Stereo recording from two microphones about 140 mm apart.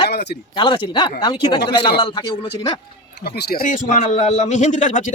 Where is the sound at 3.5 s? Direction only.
80° left; by 5.0 s 60° left (ahead or behind).